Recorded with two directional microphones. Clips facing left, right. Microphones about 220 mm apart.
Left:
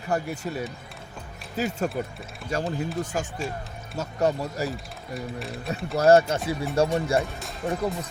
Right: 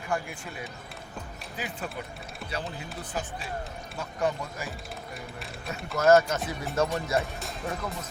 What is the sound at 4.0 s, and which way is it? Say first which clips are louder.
Speech: left 5 dB; 40° left (ahead or behind).